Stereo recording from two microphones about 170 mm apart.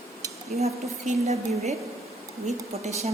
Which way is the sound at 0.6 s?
40° right (ahead or behind).